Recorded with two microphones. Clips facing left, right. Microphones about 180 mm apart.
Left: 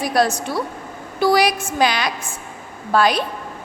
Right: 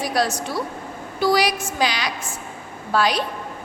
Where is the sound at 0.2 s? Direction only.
55° left (ahead or behind).